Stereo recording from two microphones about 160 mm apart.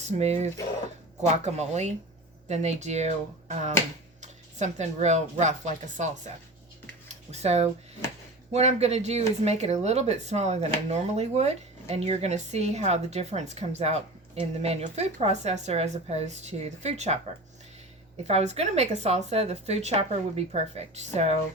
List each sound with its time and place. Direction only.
0.0 s a woman's voice: 45° right (ahead or behind)
18.3 s a woman's voice: 40° right (ahead or behind)